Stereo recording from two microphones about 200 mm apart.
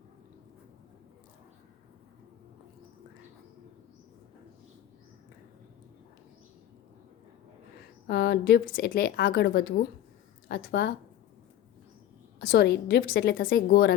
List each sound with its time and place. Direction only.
8.0 s a woman's voice: 50° left (ahead or behind)
12.4 s a woman's voice: 55° left (ahead or behind)